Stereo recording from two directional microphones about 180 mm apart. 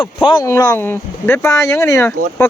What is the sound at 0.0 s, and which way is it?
Speech, 25° left (ahead or behind).